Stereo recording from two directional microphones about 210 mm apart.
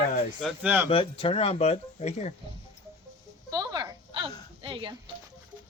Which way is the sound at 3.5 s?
20° right (ahead or behind).